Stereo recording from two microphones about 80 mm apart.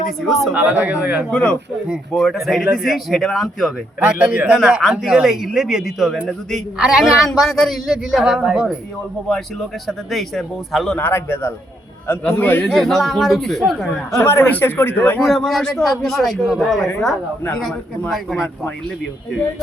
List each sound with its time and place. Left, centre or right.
0.5 s speech: centre
1.3 s speech: centre
2.1 s a man's voice: centre
4.0 s speech: centre
4.8 s a man's voice: centre
6.7 s speech: centre
7.0 s a man's voice: centre
7.9 s speech: centre
9.3 s a man's voice: centre
10.9 s speech: left
12.6 s a man's voice: centre
14.2 s speech: left
15.2 s a man's voice: centre
18.1 s a man's voice: centre